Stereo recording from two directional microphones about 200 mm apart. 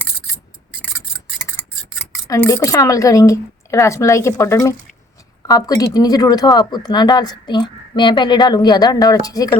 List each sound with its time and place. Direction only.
1.4 s speech: 10° left (ahead or behind)